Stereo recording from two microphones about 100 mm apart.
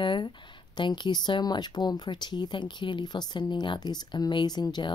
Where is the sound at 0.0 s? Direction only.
55° left (ahead or behind).